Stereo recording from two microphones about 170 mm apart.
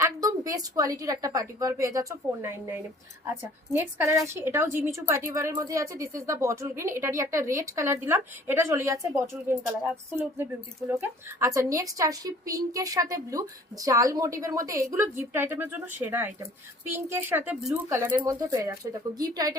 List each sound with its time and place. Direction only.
0.0 s a woman's voice: 20° right (ahead or behind)